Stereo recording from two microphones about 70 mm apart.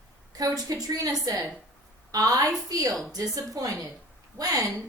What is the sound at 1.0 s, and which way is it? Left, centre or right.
A woman's voice, right.